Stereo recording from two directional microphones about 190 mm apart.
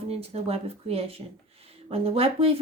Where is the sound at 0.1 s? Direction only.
30° right (ahead or behind).